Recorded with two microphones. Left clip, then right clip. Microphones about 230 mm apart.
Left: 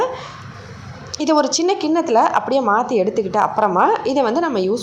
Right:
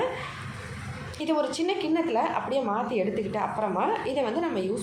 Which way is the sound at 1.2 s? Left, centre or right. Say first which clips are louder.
Left 10 dB; left.